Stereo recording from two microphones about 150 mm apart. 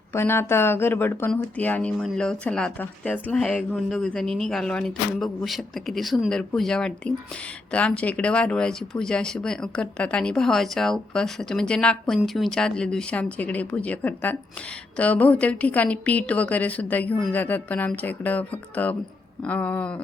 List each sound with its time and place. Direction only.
0.1 s a woman's voice: 15° left (ahead or behind)